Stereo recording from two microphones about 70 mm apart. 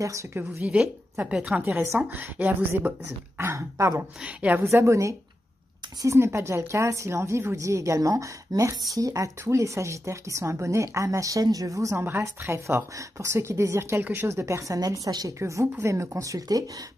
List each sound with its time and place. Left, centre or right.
0.3 s speech: right
3.3 s speech: right
4.2 s speech: centre
4.6 s speech: right
14.8 s a woman's voice: right
15.3 s speech: right